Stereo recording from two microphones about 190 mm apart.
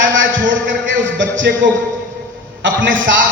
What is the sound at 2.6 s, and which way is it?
Speech, 75° right (ahead or behind).